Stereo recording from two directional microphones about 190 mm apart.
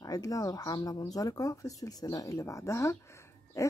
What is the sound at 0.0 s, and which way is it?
Speech, 20° left (ahead or behind).